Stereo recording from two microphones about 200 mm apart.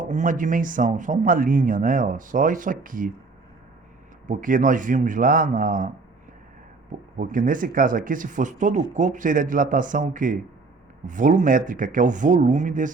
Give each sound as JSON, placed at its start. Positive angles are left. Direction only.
{"t": 0.0, "sound": "speech", "side_deg": -40}
{"t": 4.3, "sound": "speech", "side_deg": -40}
{"t": 7.2, "sound": "speech", "side_deg": -40}